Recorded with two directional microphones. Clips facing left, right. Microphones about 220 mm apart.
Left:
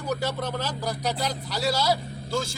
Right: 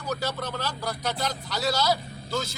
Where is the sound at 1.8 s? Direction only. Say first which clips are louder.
Left 1 dB; 30° left (ahead or behind).